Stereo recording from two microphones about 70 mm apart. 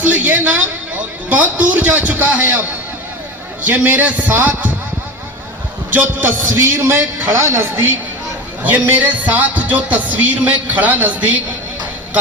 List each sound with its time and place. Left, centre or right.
0.0 s music: right
3.8 s music: right
5.9 s a man's voice: right
7.4 s speech: right
8.6 s music: right